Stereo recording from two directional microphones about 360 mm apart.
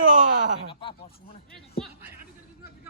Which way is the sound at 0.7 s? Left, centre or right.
Centre.